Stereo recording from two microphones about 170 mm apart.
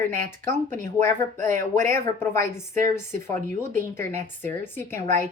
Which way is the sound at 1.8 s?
15° left (ahead or behind).